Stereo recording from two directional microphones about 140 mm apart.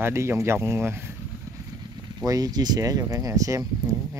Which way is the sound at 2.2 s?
25° right (ahead or behind).